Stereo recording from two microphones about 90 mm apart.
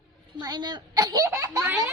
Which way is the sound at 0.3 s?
50° right (ahead or behind).